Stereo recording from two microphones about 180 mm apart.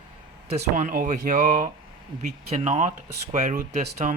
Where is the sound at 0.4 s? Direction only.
35° right (ahead or behind).